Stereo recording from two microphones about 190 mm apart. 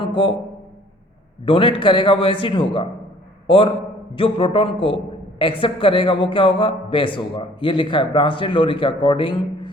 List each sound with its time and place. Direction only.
0.0 s a man's voice: 25° left (ahead or behind)
1.5 s a man's voice: 30° left (ahead or behind)